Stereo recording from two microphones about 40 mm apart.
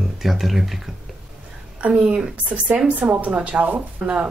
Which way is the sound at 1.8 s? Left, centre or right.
Right.